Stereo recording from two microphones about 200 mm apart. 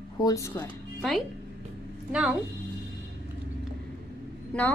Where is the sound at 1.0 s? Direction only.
Centre (ahead or behind).